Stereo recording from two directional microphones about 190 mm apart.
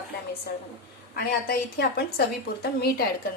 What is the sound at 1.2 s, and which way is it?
A woman's voice, 55° left (ahead or behind).